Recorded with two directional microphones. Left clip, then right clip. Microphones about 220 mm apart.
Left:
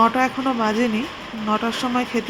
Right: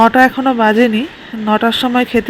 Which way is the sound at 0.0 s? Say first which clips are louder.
Right 9 dB; 20° right (ahead or behind).